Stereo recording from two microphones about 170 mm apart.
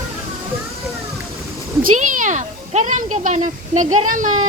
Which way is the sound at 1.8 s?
50° right (ahead or behind).